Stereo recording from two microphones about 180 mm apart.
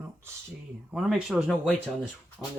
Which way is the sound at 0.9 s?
5° right (ahead or behind).